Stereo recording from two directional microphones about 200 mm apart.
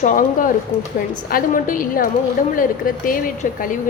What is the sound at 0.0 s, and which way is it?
A woman's voice, 40° left (ahead or behind).